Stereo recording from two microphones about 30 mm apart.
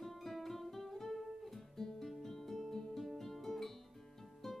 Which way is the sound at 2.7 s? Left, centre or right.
Centre.